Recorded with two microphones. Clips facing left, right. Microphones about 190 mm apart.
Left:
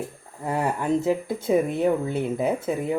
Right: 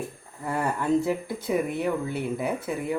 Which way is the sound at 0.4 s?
15° left (ahead or behind).